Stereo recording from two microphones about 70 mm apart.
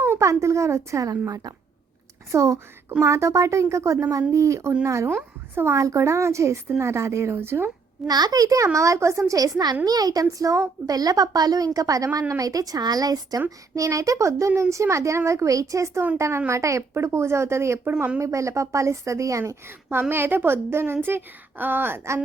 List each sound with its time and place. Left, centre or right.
0.0 s speech: right
1.3 s a woman's voice: right
2.3 s a child's voice: right
5.0 s a woman's voice: right
5.7 s a child's voice: right
8.0 s a child's voice: right
10.8 s a woman's voice: right
13.7 s a child's voice: right
19.6 s a woman's voice: right